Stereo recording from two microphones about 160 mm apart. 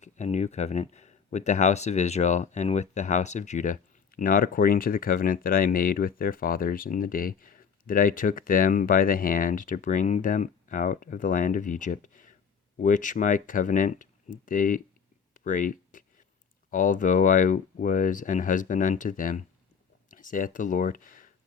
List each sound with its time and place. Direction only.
0.0 s speech: 45° left (ahead or behind)
15.3 s a sound: 55° left (ahead or behind)
16.6 s speech: 55° left (ahead or behind)